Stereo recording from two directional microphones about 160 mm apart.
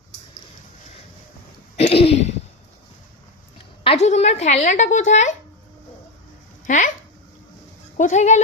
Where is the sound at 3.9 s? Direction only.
45° left (ahead or behind).